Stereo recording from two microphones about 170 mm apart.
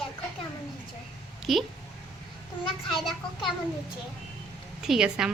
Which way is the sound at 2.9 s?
Centre (ahead or behind).